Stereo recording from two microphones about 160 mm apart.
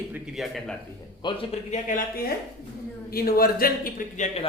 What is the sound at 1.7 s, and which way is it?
A man's voice, 60° left (ahead or behind).